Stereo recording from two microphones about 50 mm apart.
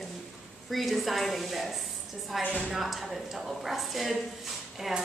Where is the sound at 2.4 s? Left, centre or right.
Left.